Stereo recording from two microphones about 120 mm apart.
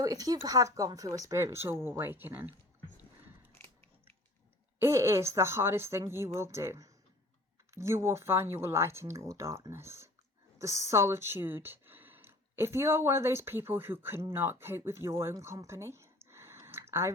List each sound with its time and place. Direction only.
0.0 s speech: 30° right (ahead or behind)
4.8 s speech: 20° right (ahead or behind)